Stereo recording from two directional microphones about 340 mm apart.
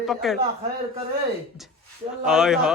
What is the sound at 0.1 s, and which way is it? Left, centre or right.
Speech, centre.